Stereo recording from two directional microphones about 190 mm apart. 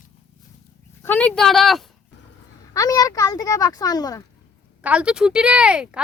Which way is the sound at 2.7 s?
20° left (ahead or behind).